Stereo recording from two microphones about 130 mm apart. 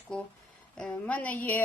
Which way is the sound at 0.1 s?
5° left (ahead or behind).